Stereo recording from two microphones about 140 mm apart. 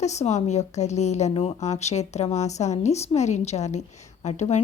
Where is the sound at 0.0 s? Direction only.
55° left (ahead or behind).